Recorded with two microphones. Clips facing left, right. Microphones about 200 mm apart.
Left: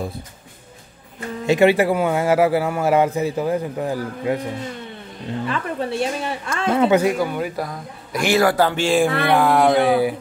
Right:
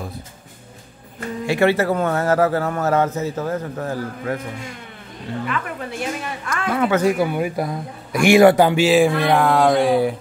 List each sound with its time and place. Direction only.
1.4 s a man's voice: 20° left (ahead or behind)
5.4 s a woman's voice: 30° left (ahead or behind)
7.2 s a man's voice: 10° right (ahead or behind)
9.2 s a sound: centre (ahead or behind)